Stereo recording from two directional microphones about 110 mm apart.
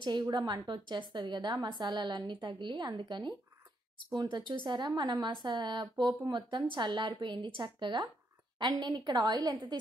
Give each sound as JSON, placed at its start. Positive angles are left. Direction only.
{"t": 0.2, "sound": "a woman's voice", "side_deg": -40}